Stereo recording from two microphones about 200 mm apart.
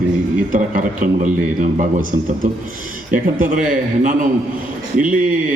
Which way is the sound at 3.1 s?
40° right (ahead or behind).